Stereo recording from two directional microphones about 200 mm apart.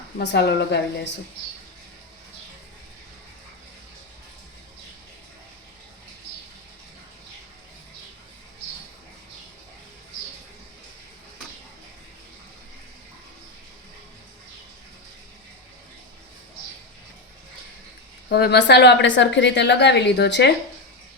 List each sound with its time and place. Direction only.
0.2 s a woman's voice: 60° left (ahead or behind)
18.3 s a woman's voice: 55° left (ahead or behind)